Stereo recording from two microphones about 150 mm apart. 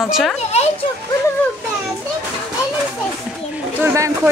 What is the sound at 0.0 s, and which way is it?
Speech, centre (ahead or behind).